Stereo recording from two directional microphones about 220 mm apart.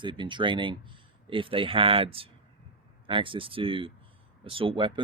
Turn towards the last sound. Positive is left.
turn(degrees=-20)  # may be behind; listen again after turning